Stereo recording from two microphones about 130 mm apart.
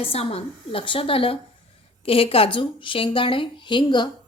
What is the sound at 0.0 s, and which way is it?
A woman's voice, 50° left (ahead or behind).